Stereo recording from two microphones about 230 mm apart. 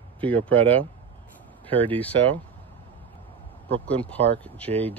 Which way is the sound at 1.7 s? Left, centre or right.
Right.